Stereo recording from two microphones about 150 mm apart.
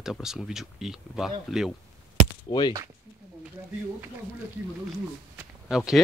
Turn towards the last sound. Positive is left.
turn(degrees=-5)  # may be behind; listen again after turning